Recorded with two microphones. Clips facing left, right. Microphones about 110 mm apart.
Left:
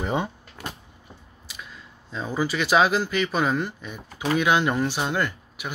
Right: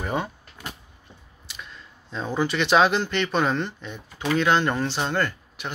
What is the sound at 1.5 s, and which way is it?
Speech, 5° left (ahead or behind).